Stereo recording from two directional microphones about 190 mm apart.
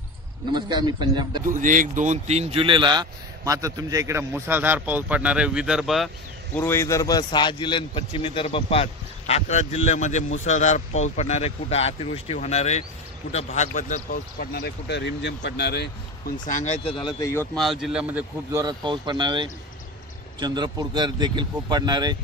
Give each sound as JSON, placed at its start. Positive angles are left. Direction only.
{"t": 0.5, "sound": "speech", "side_deg": -20}
{"t": 1.5, "sound": "speech", "side_deg": -45}
{"t": 6.5, "sound": "a man's voice", "side_deg": 10}
{"t": 16.4, "sound": "speech", "side_deg": 40}
{"t": 17.2, "sound": "speech", "side_deg": 15}
{"t": 17.6, "sound": "speech", "side_deg": 0}
{"t": 18.5, "sound": "speech", "side_deg": -20}